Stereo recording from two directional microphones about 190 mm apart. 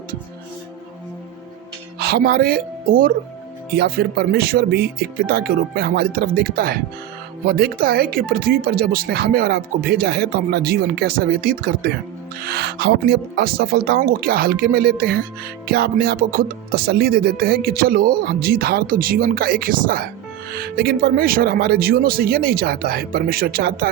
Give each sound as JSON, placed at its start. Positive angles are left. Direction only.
{"t": 2.0, "sound": "speech", "side_deg": -55}